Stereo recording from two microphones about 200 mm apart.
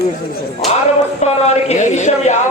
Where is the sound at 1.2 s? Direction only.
30° left (ahead or behind).